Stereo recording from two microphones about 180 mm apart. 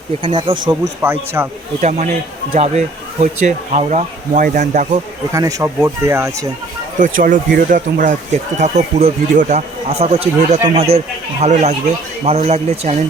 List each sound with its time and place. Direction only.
0.2 s speech: 30° right (ahead or behind)
1.0 s speech: 15° right (ahead or behind)
1.8 s speech: 40° right (ahead or behind)
5.3 s speech: 20° right (ahead or behind)
7.0 s speech: 50° right (ahead or behind)